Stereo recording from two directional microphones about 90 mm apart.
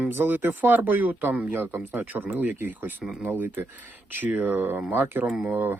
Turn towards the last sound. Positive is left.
turn(degrees=-20)  # may be behind; listen again after turning